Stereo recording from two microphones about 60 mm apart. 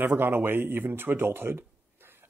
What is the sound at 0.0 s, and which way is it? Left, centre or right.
Speech, right.